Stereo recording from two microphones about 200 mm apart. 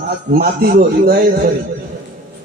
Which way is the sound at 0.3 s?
50° right (ahead or behind).